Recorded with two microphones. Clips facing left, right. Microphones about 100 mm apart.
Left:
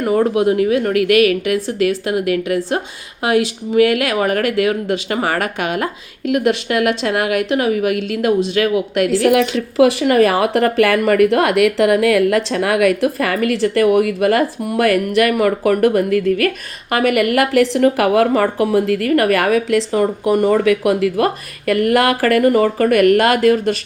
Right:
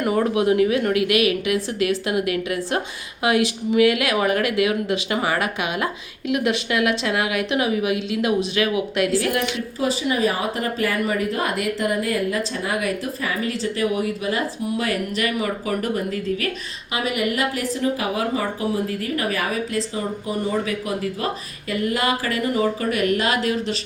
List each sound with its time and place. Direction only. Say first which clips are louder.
0.0 s speech: left 5 dB; 40° left (ahead or behind)
9.2 s speech: left 10 dB; 90° left
9.7 s speech: left 12 dB; 75° left (ahead or behind); by 21.2 s 90° left
21.7 s speech: left 8 dB; 65° left (ahead or behind)